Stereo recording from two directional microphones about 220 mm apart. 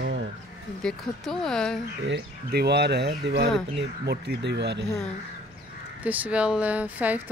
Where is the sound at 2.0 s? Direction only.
50° right (ahead or behind).